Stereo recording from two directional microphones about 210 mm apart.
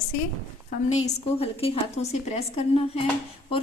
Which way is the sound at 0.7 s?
30° left (ahead or behind).